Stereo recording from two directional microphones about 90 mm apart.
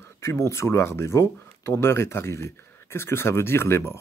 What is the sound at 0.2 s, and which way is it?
Speech, 30° left (ahead or behind).